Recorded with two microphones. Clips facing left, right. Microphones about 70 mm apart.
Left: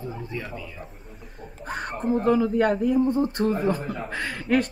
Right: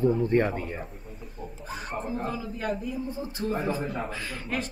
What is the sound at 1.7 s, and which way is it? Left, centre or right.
Speech, left.